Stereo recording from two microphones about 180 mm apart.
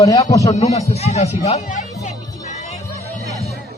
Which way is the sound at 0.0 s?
20° left (ahead or behind).